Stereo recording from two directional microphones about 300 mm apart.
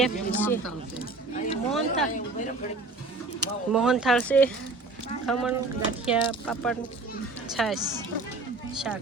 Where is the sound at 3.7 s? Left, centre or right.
Centre.